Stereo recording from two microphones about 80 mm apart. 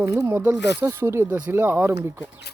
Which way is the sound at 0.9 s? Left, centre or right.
Right.